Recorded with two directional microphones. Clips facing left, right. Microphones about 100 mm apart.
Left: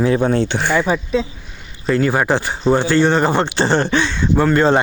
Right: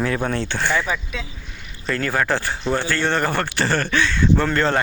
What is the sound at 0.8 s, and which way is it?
Speech, 30° left (ahead or behind).